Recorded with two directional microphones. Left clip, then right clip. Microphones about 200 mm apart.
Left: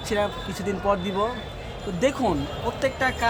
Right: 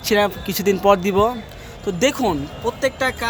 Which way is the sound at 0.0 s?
45° right (ahead or behind).